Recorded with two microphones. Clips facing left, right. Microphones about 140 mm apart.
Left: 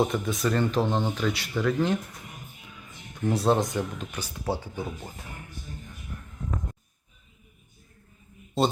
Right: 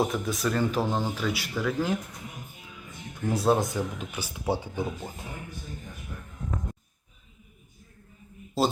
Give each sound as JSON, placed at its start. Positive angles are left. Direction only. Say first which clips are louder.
{"t": 0.0, "sound": "speech", "louder": "left 2 dB", "side_deg": 0}
{"t": 3.2, "sound": "speech", "louder": "left 1 dB", "side_deg": 0}
{"t": 4.4, "sound": "speech", "louder": "right 2 dB", "side_deg": -20}
{"t": 8.6, "sound": "speech", "louder": "left 1 dB", "side_deg": 0}